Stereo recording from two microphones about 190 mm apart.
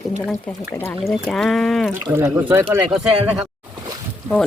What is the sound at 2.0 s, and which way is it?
Speech, 15° right (ahead or behind).